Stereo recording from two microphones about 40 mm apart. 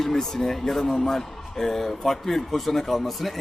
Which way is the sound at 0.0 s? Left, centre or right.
Centre.